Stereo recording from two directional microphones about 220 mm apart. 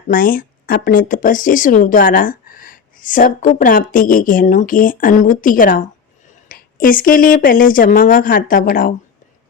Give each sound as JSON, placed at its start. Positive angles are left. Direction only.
{"t": 0.1, "sound": "speech", "side_deg": 40}